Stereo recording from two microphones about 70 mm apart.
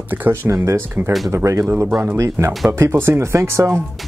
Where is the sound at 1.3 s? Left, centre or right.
Right.